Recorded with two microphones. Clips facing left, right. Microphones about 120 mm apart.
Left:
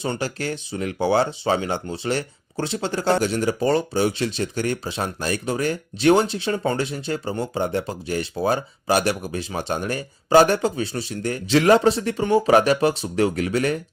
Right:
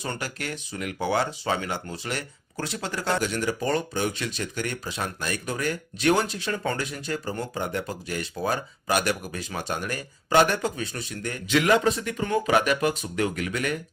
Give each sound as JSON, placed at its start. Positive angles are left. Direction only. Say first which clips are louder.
{"t": 0.0, "sound": "speech", "louder": "left 6 dB", "side_deg": 30}